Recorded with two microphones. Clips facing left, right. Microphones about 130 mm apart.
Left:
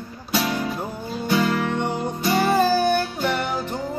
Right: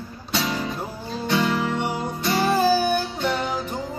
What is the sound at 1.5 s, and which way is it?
Music, 10° right (ahead or behind).